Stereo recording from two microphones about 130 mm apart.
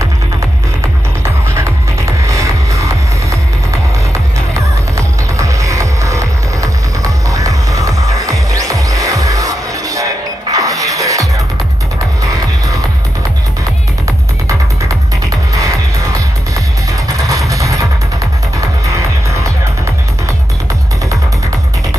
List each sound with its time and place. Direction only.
1.2 s music: 20° right (ahead or behind)
14.0 s music: 25° right (ahead or behind)
17.3 s music: 25° right (ahead or behind)